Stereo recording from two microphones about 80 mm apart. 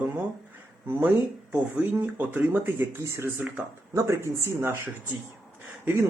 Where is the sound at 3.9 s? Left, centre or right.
Right.